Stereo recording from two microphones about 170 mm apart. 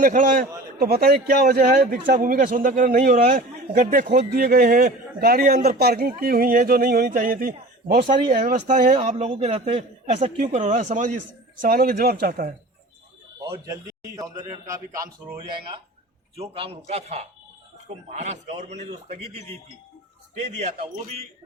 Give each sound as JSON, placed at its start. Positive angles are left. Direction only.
{"t": 0.0, "sound": "speech", "side_deg": -50}
{"t": 0.8, "sound": "speech", "side_deg": -65}
{"t": 8.0, "sound": "a man's voice", "side_deg": -30}
{"t": 8.4, "sound": "speech", "side_deg": -50}
{"t": 11.6, "sound": "speech", "side_deg": -55}
{"t": 13.4, "sound": "a man's voice", "side_deg": -25}